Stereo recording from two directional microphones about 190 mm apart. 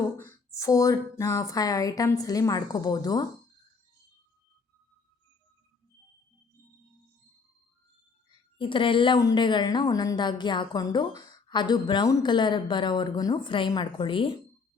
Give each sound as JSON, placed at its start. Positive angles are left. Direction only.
{"t": 0.2, "sound": "speech", "side_deg": 15}
{"t": 8.5, "sound": "a woman's voice", "side_deg": 25}